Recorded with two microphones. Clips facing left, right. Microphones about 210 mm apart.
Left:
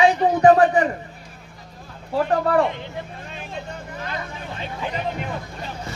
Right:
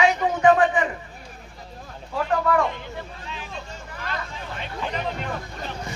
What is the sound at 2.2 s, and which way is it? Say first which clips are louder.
Speech: left 3 dB; 35° left (ahead or behind).